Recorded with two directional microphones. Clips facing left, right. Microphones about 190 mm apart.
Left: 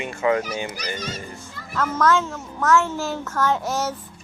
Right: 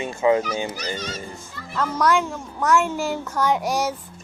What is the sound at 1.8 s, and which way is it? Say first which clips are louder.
A child's voice: even; 10° right (ahead or behind).